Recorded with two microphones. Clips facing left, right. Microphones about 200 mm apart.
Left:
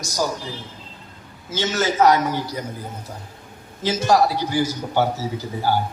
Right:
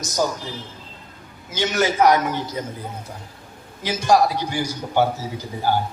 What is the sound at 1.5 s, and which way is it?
Speech, 15° right (ahead or behind).